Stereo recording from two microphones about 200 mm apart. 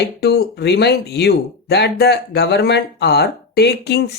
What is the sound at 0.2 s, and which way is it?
Speech, 55° left (ahead or behind).